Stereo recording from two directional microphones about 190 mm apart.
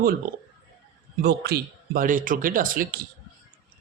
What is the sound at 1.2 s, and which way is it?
Speech, 55° right (ahead or behind).